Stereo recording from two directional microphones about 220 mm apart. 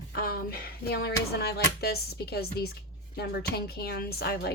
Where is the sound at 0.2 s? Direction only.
45° left (ahead or behind).